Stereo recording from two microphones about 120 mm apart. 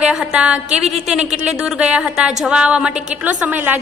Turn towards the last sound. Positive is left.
turn(degrees=-15)  # may be behind; listen again after turning